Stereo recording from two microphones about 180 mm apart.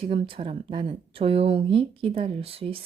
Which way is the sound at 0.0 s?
30° right (ahead or behind).